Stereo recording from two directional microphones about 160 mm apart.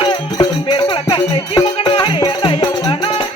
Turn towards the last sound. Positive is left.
turn(degrees=30)  # may be behind; listen again after turning